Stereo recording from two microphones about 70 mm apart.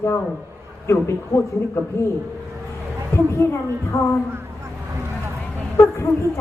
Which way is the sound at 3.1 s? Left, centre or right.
Left.